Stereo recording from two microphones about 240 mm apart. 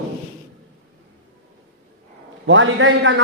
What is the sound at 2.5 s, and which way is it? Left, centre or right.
Speech, right.